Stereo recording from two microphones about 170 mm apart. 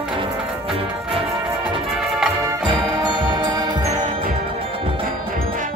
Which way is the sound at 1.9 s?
5° right (ahead or behind).